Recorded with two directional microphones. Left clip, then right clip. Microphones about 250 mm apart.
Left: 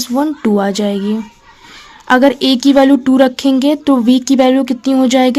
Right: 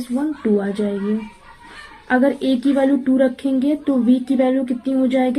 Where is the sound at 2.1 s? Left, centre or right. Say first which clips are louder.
Left 7 dB; left.